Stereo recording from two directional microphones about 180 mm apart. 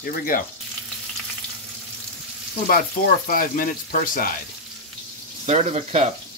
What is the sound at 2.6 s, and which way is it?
Speech, 50° left (ahead or behind).